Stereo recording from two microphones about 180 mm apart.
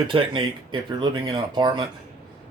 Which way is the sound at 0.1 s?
30° right (ahead or behind).